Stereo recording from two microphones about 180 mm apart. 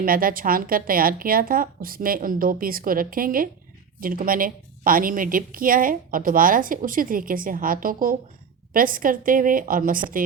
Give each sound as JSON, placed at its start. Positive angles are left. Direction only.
{"t": 0.0, "sound": "a woman's voice", "side_deg": -55}